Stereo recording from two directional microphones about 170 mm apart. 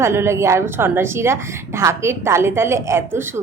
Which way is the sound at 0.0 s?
15° right (ahead or behind).